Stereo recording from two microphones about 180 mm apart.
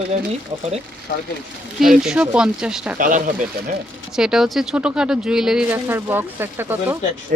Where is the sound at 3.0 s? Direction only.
50° right (ahead or behind).